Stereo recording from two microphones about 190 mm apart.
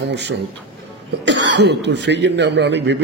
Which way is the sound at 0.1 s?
65° right (ahead or behind).